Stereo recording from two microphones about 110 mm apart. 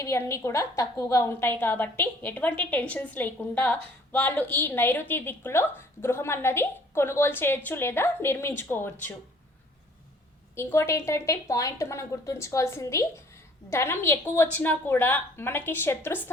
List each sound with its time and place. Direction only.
0.0 s a woman's voice: 25° left (ahead or behind)
10.5 s a woman's voice: 25° left (ahead or behind)